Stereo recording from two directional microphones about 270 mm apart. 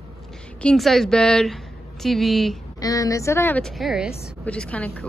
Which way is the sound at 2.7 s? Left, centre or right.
Centre.